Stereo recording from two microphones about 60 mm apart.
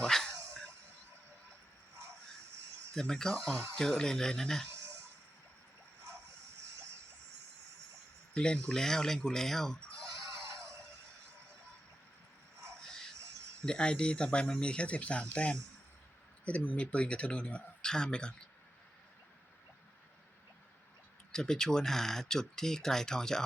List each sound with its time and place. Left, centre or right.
0.0 s dog: centre
2.9 s speech: centre
8.3 s speech: centre
10.4 s a sound: right
13.7 s speech: centre
21.3 s speech: centre